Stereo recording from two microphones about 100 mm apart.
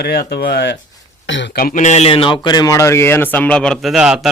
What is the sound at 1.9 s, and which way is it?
Speech, 80° left.